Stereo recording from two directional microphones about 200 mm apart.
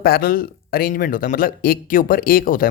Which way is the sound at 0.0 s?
50° left (ahead or behind).